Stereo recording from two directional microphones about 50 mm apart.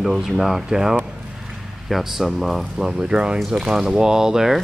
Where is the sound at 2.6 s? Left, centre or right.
Centre.